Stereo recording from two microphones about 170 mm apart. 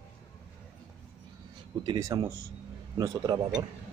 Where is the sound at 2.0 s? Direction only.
30° right (ahead or behind).